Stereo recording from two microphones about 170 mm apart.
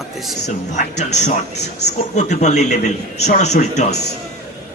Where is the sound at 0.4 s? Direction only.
45° left (ahead or behind).